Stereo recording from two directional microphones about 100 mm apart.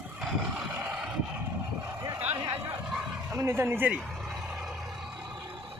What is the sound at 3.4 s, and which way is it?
Speech, 25° right (ahead or behind).